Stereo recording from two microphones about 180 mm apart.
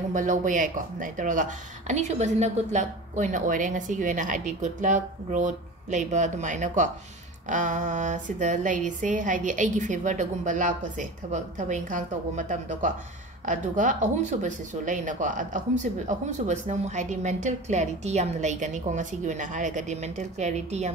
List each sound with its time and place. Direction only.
0.1 s speech: 45° right (ahead or behind)